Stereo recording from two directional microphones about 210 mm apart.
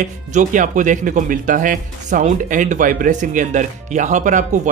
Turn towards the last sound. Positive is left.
turn(degrees=-35)  # may be behind; listen again after turning